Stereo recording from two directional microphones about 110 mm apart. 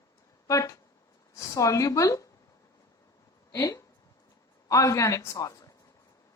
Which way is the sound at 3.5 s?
30° left (ahead or behind).